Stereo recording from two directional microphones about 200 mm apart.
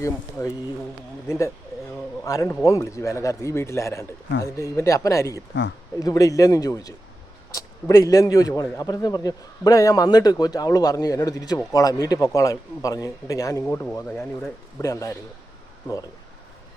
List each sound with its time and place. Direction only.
0.0 s a man's voice: 15° left (ahead or behind)
2.2 s a man's voice: 15° left (ahead or behind)